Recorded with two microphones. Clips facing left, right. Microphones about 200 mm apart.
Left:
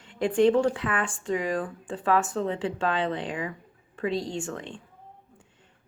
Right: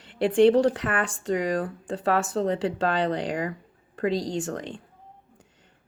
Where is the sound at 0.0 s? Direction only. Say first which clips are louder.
Right 3 dB; 35° right (ahead or behind).